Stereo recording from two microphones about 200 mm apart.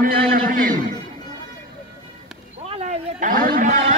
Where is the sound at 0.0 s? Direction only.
45° right (ahead or behind).